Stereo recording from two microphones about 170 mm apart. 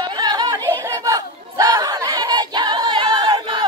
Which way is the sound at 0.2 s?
25° right (ahead or behind).